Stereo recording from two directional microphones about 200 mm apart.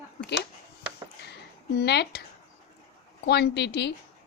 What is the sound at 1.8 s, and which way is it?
Speech, 55° left (ahead or behind).